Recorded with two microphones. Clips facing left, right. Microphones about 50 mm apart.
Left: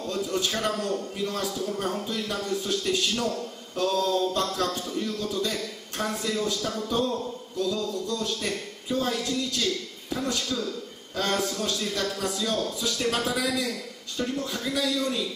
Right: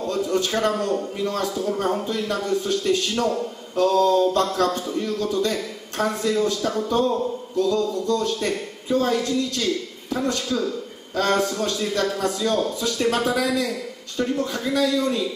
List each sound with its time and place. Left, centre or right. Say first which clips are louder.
0.0 s a sound: right 6 dB; centre
0.5 s a man's voice: right 6 dB; centre
7.5 s a man's voice: right 6 dB; centre